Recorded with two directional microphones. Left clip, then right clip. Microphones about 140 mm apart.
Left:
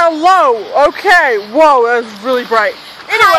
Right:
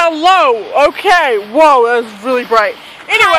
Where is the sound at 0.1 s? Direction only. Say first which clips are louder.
Even; 25° left (ahead or behind).